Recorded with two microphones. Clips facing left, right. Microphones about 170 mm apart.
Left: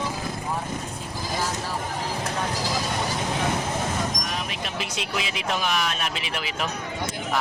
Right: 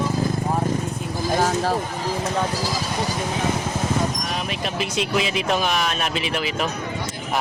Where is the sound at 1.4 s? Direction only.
70° right (ahead or behind).